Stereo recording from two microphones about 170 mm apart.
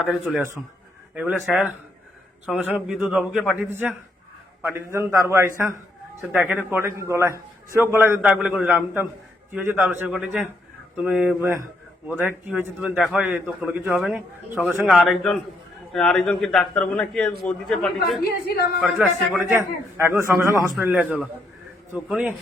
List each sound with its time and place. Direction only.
0.1 s a man's voice: centre (ahead or behind)
10.1 s a man's voice: centre (ahead or behind)
18.2 s a woman's voice: 70° left (ahead or behind)
18.8 s a man's voice: 5° right (ahead or behind)
19.5 s a man's voice: 15° right (ahead or behind)